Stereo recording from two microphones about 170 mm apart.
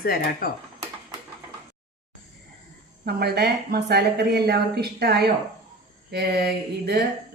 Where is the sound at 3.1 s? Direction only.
70° right (ahead or behind).